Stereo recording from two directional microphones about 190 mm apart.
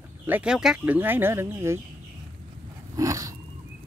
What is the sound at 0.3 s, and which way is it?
Speech, 5° right (ahead or behind).